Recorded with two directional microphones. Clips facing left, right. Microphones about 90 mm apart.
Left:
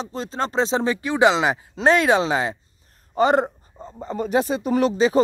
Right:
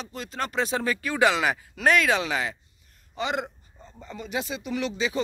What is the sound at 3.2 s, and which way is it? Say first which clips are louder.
Speech: left 11 dB; 40° left (ahead or behind).